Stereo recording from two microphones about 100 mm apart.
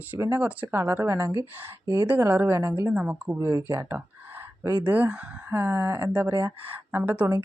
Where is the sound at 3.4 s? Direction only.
30° right (ahead or behind).